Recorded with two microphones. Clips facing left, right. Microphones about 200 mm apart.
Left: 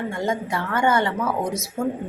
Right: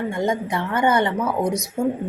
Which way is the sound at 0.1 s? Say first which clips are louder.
Right 2 dB; 20° right (ahead or behind).